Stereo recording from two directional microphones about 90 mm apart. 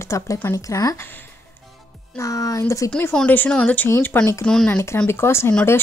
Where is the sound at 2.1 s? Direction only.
35° left (ahead or behind).